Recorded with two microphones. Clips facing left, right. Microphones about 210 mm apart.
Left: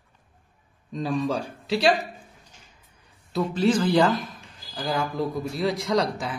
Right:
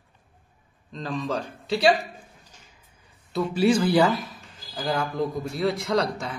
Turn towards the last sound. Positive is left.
turn(degrees=0)  # may be behind; listen again after turning